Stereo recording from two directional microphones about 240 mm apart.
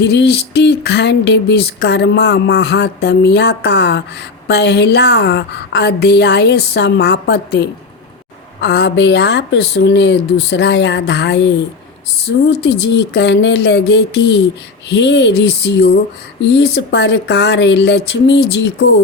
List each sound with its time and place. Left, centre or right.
0.0 s speech: left
8.6 s speech: left
12.8 s speech: left